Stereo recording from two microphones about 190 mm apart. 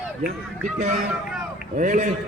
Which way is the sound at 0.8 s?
35° right (ahead or behind).